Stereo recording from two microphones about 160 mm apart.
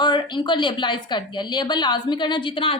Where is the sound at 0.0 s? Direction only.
30° left (ahead or behind).